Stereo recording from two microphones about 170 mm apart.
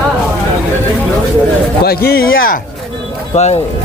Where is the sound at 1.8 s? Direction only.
65° left (ahead or behind).